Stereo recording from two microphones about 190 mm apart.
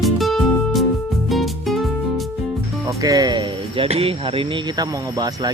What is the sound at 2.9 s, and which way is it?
Speech, 20° right (ahead or behind).